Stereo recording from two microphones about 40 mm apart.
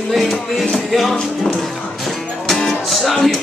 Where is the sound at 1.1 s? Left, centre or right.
Centre.